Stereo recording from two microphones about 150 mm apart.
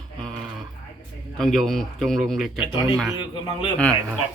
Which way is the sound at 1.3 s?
Centre (ahead or behind).